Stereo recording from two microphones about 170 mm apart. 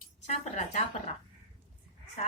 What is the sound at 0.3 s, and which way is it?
Speech, 45° left (ahead or behind).